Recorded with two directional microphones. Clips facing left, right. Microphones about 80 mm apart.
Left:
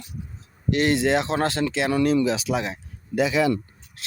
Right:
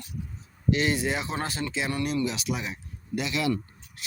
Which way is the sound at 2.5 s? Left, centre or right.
Left.